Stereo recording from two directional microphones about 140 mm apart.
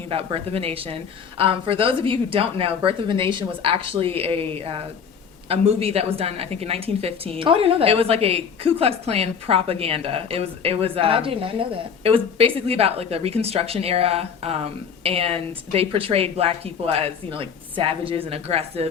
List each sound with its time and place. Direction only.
0.1 s speech: 40° right (ahead or behind)